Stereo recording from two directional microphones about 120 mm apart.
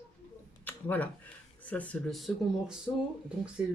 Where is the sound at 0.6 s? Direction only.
15° left (ahead or behind).